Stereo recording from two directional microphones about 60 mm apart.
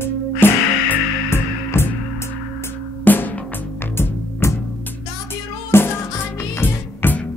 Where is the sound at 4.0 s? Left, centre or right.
Left.